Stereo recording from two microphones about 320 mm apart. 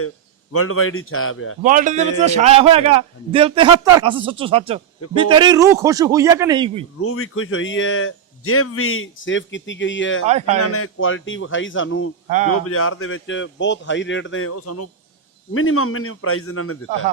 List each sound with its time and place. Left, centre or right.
0.5 s speech: left
1.6 s a man's voice: right
7.0 s speech: left
10.2 s a man's voice: centre
10.6 s speech: left